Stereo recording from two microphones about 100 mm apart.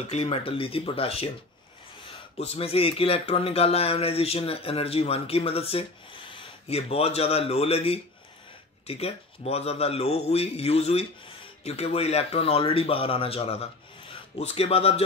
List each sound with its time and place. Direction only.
0.1 s speech: 75° left (ahead or behind)
2.3 s a man's voice: 90° left